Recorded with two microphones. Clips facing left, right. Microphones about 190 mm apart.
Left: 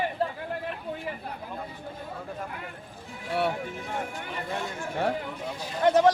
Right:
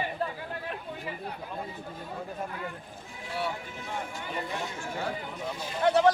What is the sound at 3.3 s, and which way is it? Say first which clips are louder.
Speech: left 6 dB; 60° left (ahead or behind).